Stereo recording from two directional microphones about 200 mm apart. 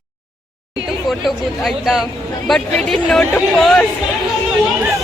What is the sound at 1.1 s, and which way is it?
Speech, centre (ahead or behind).